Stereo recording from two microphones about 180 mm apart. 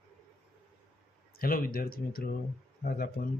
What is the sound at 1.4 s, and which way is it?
Speech, 55° left (ahead or behind).